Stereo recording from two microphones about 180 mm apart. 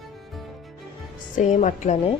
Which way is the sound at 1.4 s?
40° left (ahead or behind).